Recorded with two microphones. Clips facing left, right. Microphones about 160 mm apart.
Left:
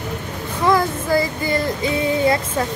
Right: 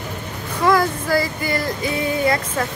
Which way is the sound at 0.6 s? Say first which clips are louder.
Even; 20° left (ahead or behind).